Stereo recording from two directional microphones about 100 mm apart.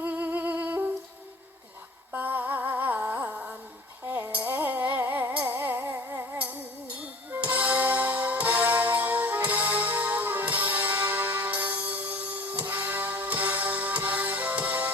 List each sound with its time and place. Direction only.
0.0 s music: 20° right (ahead or behind)
2.1 s a sound: 20° right (ahead or behind)
4.3 s music: 15° right (ahead or behind)
6.4 s music: 15° right (ahead or behind)